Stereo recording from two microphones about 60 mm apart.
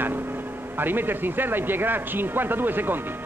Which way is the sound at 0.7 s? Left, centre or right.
Right.